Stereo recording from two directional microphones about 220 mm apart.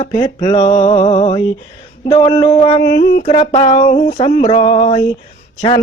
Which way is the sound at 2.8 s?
45° left (ahead or behind).